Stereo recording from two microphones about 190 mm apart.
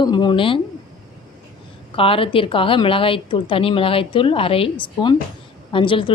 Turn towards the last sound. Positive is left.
turn(degrees=25)  # may be behind; listen again after turning